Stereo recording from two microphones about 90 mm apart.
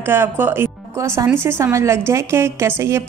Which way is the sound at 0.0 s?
25° right (ahead or behind).